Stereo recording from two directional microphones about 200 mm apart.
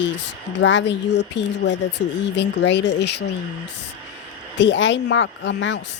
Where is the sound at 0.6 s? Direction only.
65° left (ahead or behind).